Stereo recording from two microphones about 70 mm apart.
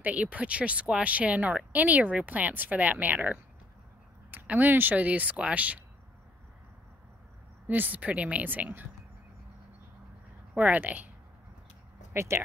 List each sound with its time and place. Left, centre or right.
0.0 s speech: centre
7.6 s speech: right
10.5 s speech: right
12.1 s speech: right